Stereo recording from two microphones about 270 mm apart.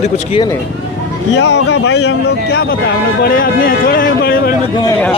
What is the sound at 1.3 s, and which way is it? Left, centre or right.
Speech, left.